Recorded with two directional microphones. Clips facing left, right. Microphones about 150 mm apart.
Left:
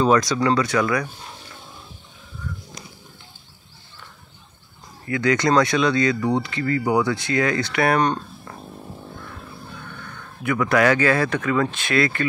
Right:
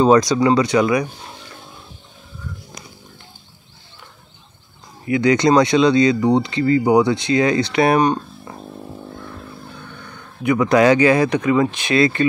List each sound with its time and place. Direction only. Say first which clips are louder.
0.1 s speech: right 5 dB; 20° right (ahead or behind)
5.0 s speech: right 5 dB; 20° right (ahead or behind)
8.0 s a sound: right 4 dB; 10° right (ahead or behind)
10.4 s speech: right 5 dB; 20° right (ahead or behind)